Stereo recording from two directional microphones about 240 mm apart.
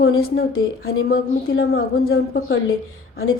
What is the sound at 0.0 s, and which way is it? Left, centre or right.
A woman's voice, left.